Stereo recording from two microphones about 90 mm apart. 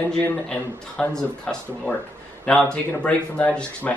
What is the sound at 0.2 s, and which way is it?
Speech, 15° left (ahead or behind).